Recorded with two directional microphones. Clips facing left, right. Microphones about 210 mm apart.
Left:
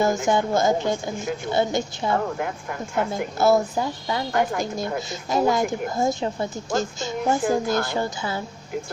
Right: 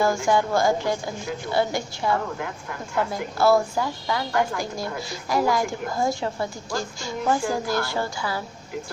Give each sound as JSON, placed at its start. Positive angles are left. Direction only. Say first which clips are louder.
{"t": 0.0, "sound": "speech", "louder": "even", "side_deg": 20}